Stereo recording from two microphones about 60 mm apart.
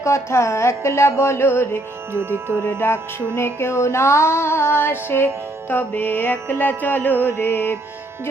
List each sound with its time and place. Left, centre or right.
0.0 s music: left
2.1 s music: right
2.8 s music: left